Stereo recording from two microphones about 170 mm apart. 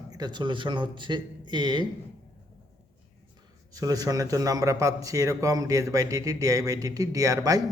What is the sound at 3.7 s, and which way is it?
A man's voice, 20° right (ahead or behind).